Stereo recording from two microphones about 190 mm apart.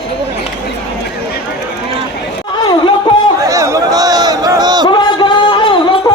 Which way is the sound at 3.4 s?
15° right (ahead or behind).